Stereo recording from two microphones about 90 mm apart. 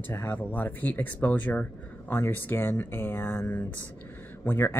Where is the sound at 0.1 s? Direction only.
25° left (ahead or behind).